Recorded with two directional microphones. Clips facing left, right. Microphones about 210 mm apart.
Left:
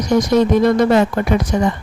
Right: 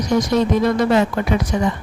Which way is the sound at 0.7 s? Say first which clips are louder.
Left 3 dB; 45° left (ahead or behind).